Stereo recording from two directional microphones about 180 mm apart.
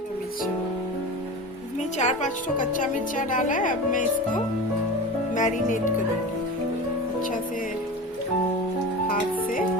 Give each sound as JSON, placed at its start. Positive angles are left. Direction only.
{"t": 2.0, "sound": "speech", "side_deg": 40}
{"t": 5.3, "sound": "speech", "side_deg": 45}
{"t": 9.0, "sound": "music", "side_deg": 50}